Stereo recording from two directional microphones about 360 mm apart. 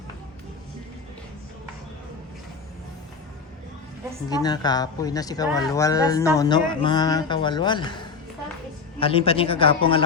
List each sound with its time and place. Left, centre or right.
4.3 s speech: centre